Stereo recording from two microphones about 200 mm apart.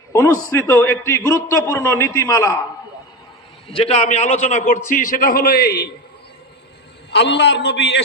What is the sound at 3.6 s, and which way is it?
A man's voice, 30° left (ahead or behind).